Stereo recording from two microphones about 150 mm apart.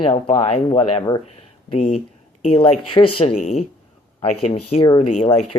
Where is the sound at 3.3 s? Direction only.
50° left (ahead or behind).